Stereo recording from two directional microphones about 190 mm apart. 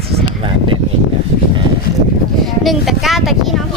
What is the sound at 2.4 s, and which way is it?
Speech, centre (ahead or behind).